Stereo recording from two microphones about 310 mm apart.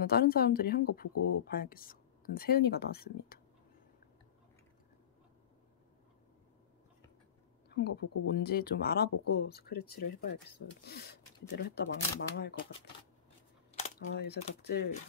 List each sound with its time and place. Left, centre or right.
0.0 s speech: left
7.7 s speech: left
13.9 s speech: left